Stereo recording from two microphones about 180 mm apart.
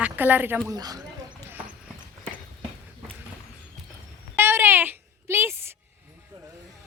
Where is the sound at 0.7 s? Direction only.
20° right (ahead or behind).